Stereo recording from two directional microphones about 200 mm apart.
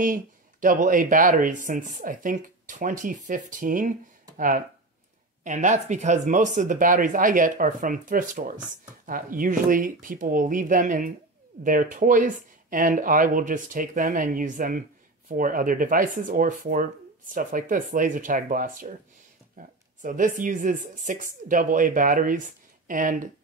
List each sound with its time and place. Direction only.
0.0 s speech: 40° right (ahead or behind)
5.4 s speech: 40° right (ahead or behind)